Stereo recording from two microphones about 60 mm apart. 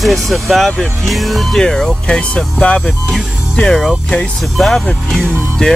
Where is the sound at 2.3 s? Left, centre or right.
Centre.